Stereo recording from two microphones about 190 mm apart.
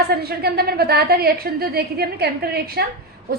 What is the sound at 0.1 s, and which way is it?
A woman's voice, 55° right (ahead or behind).